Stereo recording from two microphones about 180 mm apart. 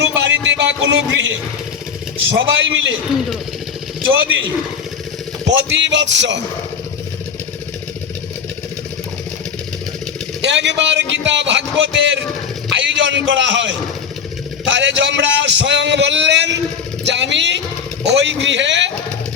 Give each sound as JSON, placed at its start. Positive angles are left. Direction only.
{"t": 0.2, "sound": "music", "side_deg": -90}
{"t": 4.1, "sound": "music", "side_deg": -90}
{"t": 5.5, "sound": "a man's voice", "side_deg": -85}
{"t": 10.4, "sound": "a man's voice", "side_deg": -80}